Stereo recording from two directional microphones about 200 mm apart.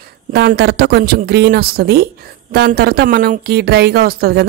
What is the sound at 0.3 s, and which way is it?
Speech, 55° right (ahead or behind).